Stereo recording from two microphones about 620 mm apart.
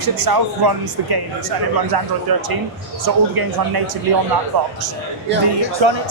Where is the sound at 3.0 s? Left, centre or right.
Right.